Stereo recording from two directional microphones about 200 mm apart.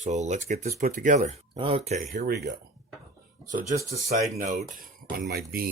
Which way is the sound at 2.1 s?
55° right (ahead or behind).